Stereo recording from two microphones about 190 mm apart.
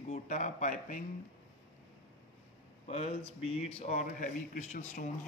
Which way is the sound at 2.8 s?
35° left (ahead or behind).